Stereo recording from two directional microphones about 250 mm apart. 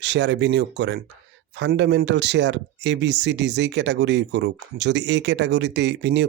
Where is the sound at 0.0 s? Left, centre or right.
Right.